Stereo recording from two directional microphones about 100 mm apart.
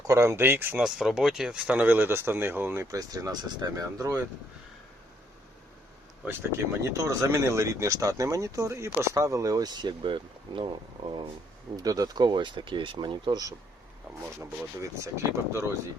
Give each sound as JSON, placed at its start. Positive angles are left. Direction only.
{"t": 0.1, "sound": "speech", "side_deg": -30}
{"t": 0.8, "sound": "speech", "side_deg": -5}
{"t": 2.8, "sound": "speech", "side_deg": -35}
{"t": 6.9, "sound": "speech", "side_deg": -30}
{"t": 11.8, "sound": "speech", "side_deg": -40}
{"t": 14.3, "sound": "speech", "side_deg": -30}